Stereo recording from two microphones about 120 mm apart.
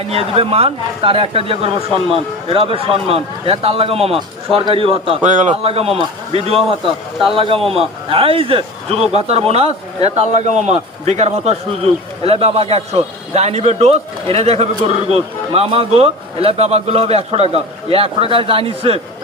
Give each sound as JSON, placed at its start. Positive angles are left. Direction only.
{"t": 0.1, "sound": "speech", "side_deg": -55}
{"t": 5.2, "sound": "a man's voice", "side_deg": -90}
{"t": 5.6, "sound": "a man's voice", "side_deg": -55}